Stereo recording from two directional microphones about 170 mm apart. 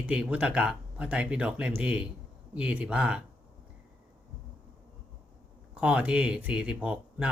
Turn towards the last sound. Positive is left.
turn(degrees=-10)  # may be behind; listen again after turning